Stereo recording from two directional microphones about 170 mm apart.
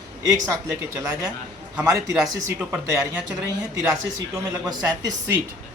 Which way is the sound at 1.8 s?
20° right (ahead or behind).